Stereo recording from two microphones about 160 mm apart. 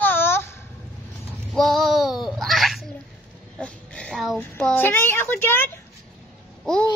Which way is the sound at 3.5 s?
5° left (ahead or behind).